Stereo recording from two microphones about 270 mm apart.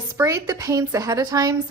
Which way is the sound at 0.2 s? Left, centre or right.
Centre.